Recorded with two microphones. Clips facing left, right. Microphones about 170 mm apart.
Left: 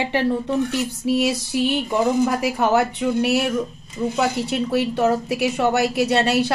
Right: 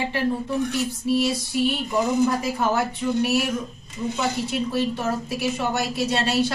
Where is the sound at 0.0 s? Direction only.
75° left (ahead or behind).